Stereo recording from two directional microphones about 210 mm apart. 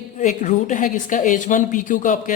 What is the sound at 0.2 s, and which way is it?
A woman's voice, 35° left (ahead or behind).